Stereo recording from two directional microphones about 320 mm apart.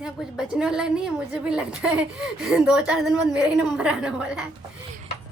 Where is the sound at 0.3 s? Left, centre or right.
Centre.